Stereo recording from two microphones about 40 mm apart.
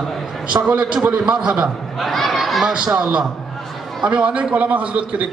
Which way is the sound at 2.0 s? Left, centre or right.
Centre.